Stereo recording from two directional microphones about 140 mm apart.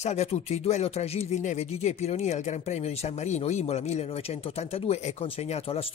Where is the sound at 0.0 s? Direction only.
50° left (ahead or behind).